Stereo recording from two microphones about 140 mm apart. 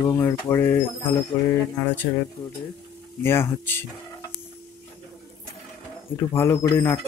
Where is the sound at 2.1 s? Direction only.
25° left (ahead or behind).